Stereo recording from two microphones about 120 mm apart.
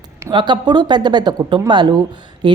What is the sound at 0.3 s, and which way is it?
Speech, 40° right (ahead or behind).